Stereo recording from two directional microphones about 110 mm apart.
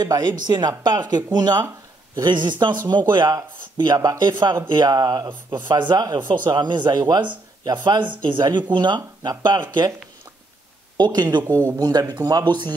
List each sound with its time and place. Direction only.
0.0 s speech: 40° right (ahead or behind)
11.0 s speech: 40° right (ahead or behind)
11.4 s speech: 25° right (ahead or behind)
11.8 s speech: 35° right (ahead or behind)